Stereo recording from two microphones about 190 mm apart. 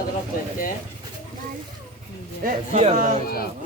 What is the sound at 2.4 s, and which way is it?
Speech, 40° right (ahead or behind).